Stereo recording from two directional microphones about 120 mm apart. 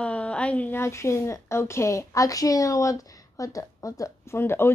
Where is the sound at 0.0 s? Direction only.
10° left (ahead or behind).